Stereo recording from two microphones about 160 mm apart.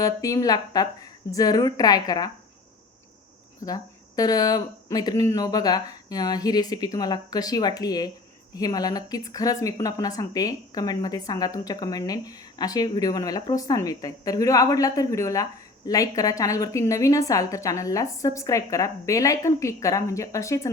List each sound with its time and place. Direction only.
0.0 s speech: 20° left (ahead or behind)
3.7 s speech: 25° left (ahead or behind)